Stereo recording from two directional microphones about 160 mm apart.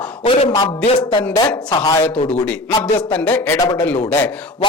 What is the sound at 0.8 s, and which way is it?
Speech, 40° left (ahead or behind).